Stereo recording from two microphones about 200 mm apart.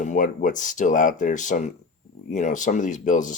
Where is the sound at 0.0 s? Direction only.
40° left (ahead or behind).